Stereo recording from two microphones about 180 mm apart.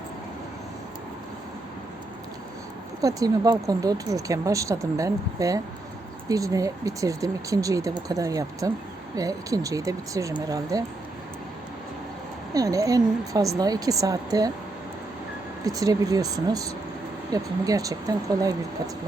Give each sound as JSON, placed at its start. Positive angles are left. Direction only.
{"t": 3.0, "sound": "speech", "side_deg": -20}
{"t": 12.5, "sound": "speech", "side_deg": -20}
{"t": 15.6, "sound": "speech", "side_deg": -20}